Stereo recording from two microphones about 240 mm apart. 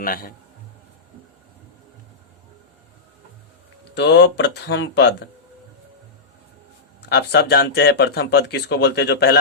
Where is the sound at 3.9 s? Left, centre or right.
Left.